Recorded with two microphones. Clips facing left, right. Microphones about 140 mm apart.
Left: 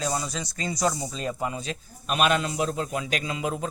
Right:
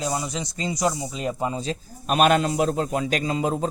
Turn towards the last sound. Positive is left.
turn(degrees=-35)  # may be behind; listen again after turning